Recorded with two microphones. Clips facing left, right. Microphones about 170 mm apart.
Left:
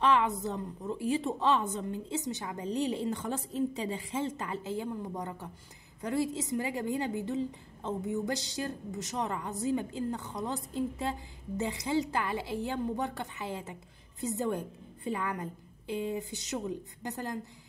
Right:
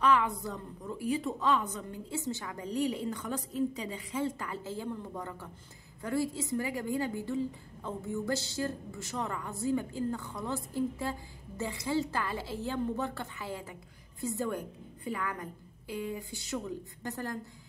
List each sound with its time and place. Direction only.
0.0 s a woman's voice: 25° left (ahead or behind)